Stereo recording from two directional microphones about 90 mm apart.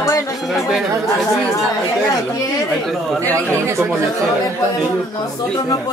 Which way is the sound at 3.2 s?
15° left (ahead or behind).